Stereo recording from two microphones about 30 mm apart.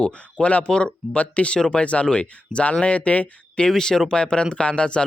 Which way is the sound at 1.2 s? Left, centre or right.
Left.